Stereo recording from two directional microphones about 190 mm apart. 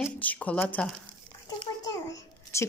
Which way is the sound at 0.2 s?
10° left (ahead or behind).